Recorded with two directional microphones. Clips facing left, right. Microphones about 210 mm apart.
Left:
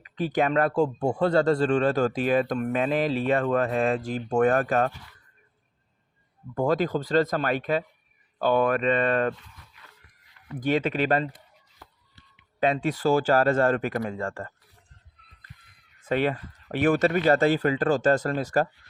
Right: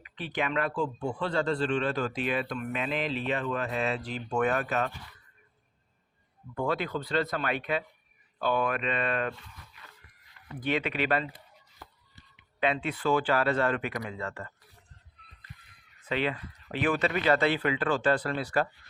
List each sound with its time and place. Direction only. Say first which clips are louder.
0.0 s speech: left 8 dB; 40° left (ahead or behind)
6.5 s speech: left 6 dB; 40° left (ahead or behind)
10.6 s speech: left 5 dB; 45° left (ahead or behind)
12.5 s speech: left 5 dB; 45° left (ahead or behind)
16.0 s speech: left 5 dB; 45° left (ahead or behind)